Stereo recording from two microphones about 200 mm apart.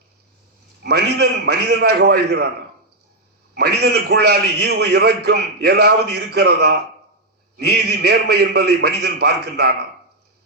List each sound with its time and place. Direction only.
0.8 s a man's voice: 55° right (ahead or behind)
3.5 s a man's voice: 55° right (ahead or behind)